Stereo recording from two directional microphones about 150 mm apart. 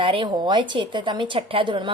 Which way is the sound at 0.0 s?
35° right (ahead or behind).